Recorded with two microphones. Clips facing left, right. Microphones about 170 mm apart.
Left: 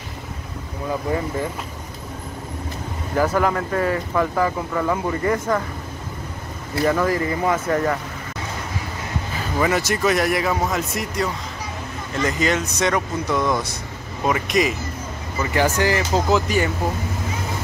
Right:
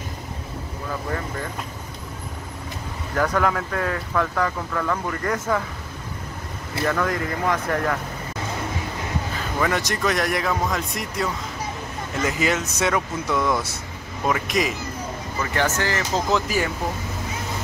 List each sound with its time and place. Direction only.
1.1 s speech: 20° left (ahead or behind)
3.2 s speech: 5° left (ahead or behind)
6.8 s speech: 5° left (ahead or behind)
9.6 s speech: 5° left (ahead or behind)
15.5 s speech: 10° left (ahead or behind)